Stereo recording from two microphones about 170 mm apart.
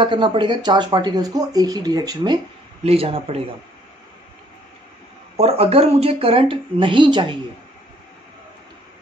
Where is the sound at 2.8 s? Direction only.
35° right (ahead or behind).